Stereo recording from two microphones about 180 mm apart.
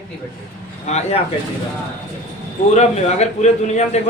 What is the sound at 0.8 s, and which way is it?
Speech, 40° left (ahead or behind).